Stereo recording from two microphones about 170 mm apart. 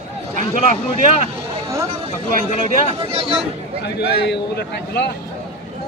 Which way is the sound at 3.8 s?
80° left.